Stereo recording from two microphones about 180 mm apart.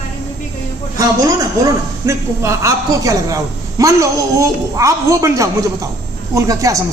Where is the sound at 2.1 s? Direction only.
15° right (ahead or behind).